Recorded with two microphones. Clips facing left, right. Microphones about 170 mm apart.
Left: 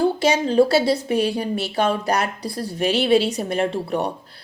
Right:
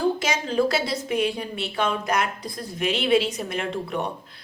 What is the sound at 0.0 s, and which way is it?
A woman's voice, 35° left (ahead or behind).